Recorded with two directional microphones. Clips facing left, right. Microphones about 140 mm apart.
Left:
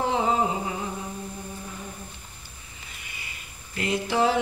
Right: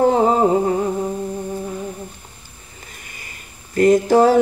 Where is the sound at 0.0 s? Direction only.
45° right (ahead or behind).